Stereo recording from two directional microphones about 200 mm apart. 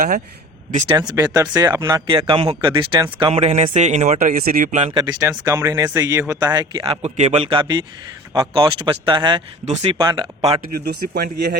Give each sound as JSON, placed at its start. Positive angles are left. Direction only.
{"t": 0.7, "sound": "speech", "side_deg": -40}
{"t": 0.9, "sound": "speech", "side_deg": -15}
{"t": 4.9, "sound": "speech", "side_deg": -20}
{"t": 10.6, "sound": "speech", "side_deg": -55}